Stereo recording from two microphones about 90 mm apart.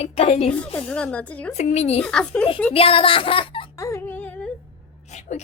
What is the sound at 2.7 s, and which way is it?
Speech, 90° left.